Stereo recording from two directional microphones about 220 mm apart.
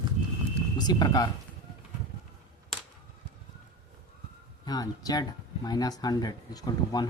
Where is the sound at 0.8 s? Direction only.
20° left (ahead or behind).